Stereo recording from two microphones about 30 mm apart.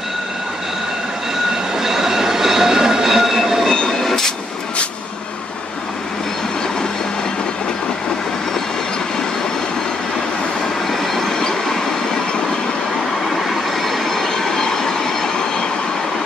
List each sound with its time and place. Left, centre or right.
1.8 s train: centre
4.0 s train: centre
10.9 s train: centre
13.3 s train: centre